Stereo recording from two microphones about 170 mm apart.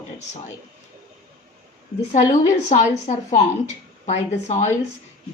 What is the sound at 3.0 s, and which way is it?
Speech, 45° left (ahead or behind).